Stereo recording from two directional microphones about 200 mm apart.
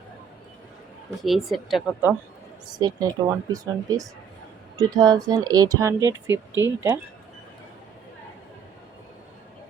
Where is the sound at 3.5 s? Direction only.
15° right (ahead or behind).